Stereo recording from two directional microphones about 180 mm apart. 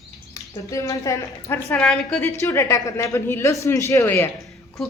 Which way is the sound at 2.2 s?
15° left (ahead or behind).